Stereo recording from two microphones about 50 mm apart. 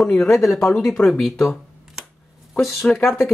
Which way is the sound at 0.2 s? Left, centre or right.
Centre.